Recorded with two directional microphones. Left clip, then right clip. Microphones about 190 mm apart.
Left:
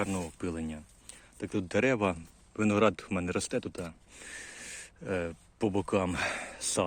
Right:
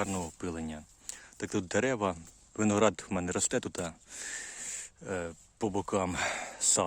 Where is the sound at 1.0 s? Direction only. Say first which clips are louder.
Right 2 dB; 30° right (ahead or behind).